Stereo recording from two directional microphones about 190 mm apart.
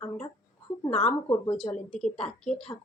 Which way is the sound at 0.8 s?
35° left (ahead or behind).